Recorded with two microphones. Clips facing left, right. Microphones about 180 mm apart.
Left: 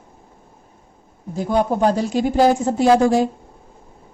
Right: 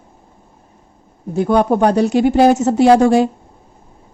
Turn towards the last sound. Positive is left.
turn(degrees=-65)  # may be behind; listen again after turning